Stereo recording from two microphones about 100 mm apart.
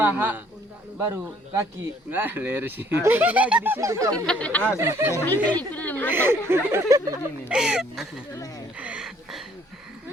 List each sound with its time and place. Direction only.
0.0 s a man's voice: 20° right (ahead or behind)
0.9 s speech: 30° right (ahead or behind)
3.8 s speech: 30° right (ahead or behind)
4.1 s speech: 10° left (ahead or behind)
4.8 s speech: 25° right (ahead or behind)
5.5 s speech: 15° left (ahead or behind)
6.1 s speech: 25° right (ahead or behind)
7.4 s speech: 5° right (ahead or behind)
8.8 s a sound: 10° right (ahead or behind)